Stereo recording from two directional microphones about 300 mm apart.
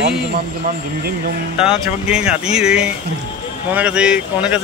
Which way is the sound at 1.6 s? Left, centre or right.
Centre.